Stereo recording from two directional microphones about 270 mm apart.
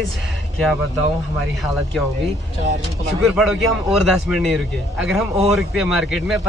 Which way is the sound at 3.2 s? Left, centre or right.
Centre.